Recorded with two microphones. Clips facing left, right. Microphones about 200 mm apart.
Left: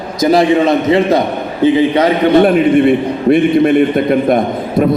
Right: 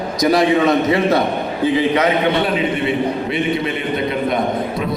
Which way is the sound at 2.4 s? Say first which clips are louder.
Left 10 dB; 55° left (ahead or behind).